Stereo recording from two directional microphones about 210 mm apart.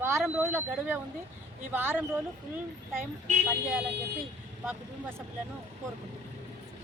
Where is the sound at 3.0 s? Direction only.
35° right (ahead or behind).